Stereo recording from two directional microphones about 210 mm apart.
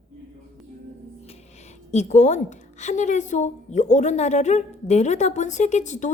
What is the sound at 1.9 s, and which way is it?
A woman's voice, 35° left (ahead or behind).